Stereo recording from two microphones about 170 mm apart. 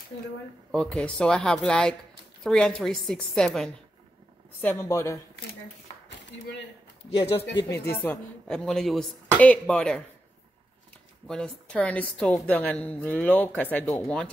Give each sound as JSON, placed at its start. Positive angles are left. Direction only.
{"t": 0.7, "sound": "a woman's voice", "side_deg": 5}
{"t": 7.1, "sound": "speech", "side_deg": 35}
{"t": 8.1, "sound": "speech", "side_deg": 5}
{"t": 11.2, "sound": "a woman's voice", "side_deg": 5}